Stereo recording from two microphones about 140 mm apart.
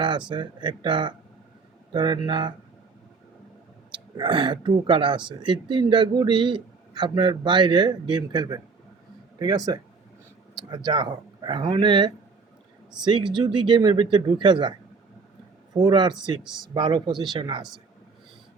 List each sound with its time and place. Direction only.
0.3 s a man's voice: 35° right (ahead or behind)
4.2 s a man's voice: 35° right (ahead or behind)